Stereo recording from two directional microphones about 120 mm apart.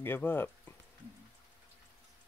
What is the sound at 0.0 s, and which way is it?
Speech, 20° left (ahead or behind).